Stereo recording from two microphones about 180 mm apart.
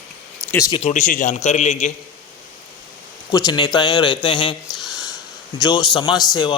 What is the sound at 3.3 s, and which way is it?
A man's voice, 20° left (ahead or behind).